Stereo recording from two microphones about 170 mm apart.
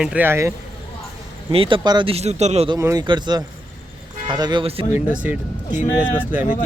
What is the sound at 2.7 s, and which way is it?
Speech, 20° right (ahead or behind).